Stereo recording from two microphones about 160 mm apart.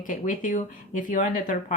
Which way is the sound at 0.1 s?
55° left (ahead or behind).